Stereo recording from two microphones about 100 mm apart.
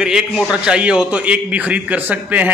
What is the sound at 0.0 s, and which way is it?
A man's voice, 10° right (ahead or behind).